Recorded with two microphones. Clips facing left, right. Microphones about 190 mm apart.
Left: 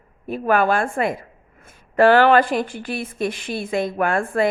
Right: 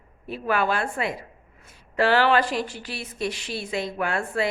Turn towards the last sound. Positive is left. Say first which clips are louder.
# left 6 dB
turn(degrees=50)  # may be behind; listen again after turning